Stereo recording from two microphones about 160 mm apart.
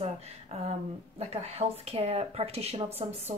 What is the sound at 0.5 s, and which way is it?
Speech, 40° right (ahead or behind).